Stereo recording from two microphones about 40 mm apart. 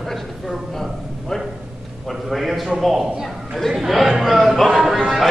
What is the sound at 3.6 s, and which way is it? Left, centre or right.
Chatter, centre.